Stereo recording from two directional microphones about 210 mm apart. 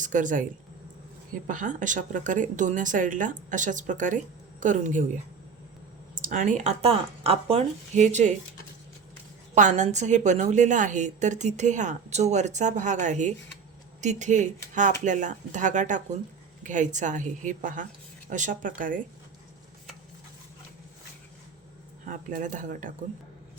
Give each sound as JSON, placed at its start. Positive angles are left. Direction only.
{"t": 0.0, "sound": "speech", "side_deg": -35}
{"t": 1.5, "sound": "a woman's voice", "side_deg": -40}
{"t": 6.1, "sound": "a woman's voice", "side_deg": -40}
{"t": 9.6, "sound": "a woman's voice", "side_deg": -35}
{"t": 22.0, "sound": "a woman's voice", "side_deg": -40}